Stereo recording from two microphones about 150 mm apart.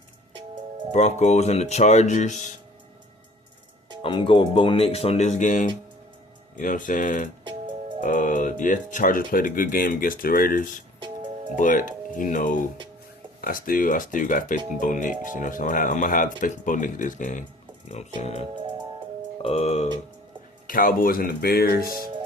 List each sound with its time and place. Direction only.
1.2 s speech: 45° left (ahead or behind)
4.0 s speech: 35° left (ahead or behind)
20.7 s speech: 65° left (ahead or behind); by 21.8 s 90° left
21.8 s speech: 25° right (ahead or behind)